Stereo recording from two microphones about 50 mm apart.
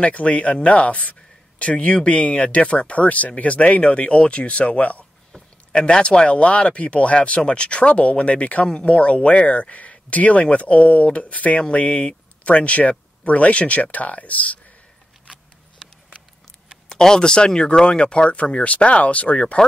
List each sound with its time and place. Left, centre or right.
0.0 s speech: left
5.3 s speech: centre
16.9 s speech: centre